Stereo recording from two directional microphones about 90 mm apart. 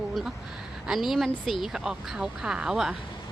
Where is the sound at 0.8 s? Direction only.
5° right (ahead or behind).